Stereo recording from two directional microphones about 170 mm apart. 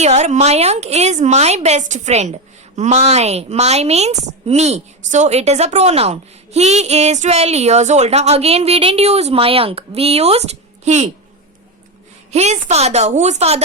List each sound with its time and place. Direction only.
0.0 s speech: 40° right (ahead or behind)
12.3 s speech: 40° right (ahead or behind)